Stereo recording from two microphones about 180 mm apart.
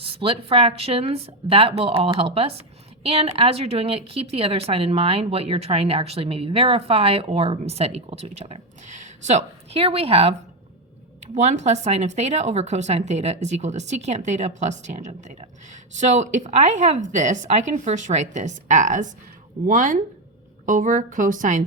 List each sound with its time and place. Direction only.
0.0 s a woman's voice: 30° right (ahead or behind)